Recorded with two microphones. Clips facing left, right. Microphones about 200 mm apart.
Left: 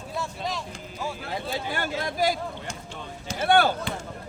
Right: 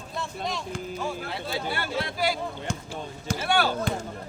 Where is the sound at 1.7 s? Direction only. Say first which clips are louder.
Left 1 dB; 45° left (ahead or behind).